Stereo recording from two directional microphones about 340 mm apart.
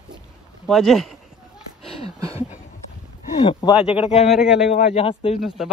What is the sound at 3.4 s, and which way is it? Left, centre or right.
Speech, centre.